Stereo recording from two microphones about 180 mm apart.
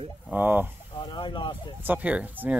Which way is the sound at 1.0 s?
25° left (ahead or behind).